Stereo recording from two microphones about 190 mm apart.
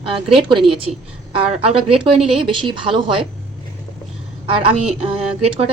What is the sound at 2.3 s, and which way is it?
Speech, 25° right (ahead or behind).